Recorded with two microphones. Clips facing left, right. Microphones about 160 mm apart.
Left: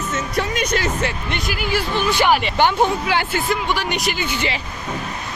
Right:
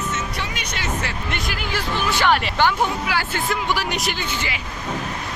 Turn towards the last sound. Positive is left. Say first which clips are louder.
# left 4 dB
turn(degrees=15)  # may be behind; listen again after turning